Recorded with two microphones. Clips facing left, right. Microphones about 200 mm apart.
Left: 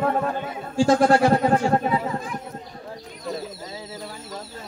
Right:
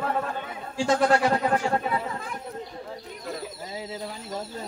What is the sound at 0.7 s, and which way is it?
Speech, 45° left (ahead or behind).